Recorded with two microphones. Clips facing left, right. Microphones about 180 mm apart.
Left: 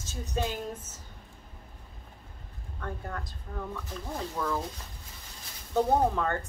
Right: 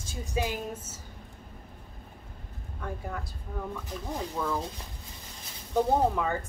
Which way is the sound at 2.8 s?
5° right (ahead or behind).